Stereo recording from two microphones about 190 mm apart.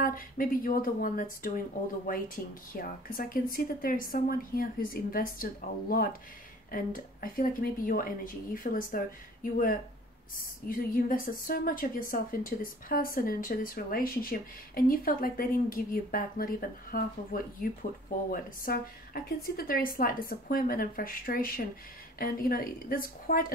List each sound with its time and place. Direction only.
0.0 s a woman's voice: 50° left (ahead or behind)